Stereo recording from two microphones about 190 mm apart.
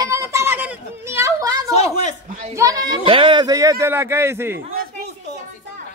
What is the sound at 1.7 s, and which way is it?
Speech, 35° left (ahead or behind).